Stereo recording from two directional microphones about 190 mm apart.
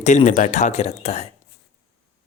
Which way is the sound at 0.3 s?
40° left (ahead or behind).